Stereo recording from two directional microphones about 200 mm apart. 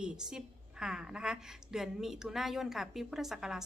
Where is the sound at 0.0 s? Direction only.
5° right (ahead or behind).